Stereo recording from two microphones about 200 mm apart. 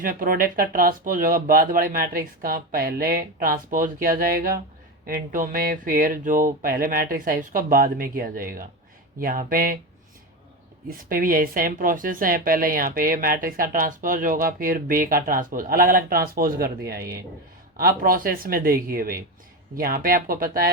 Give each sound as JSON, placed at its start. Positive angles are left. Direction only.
{"t": 0.0, "sound": "speech", "side_deg": -45}
{"t": 10.8, "sound": "speech", "side_deg": -45}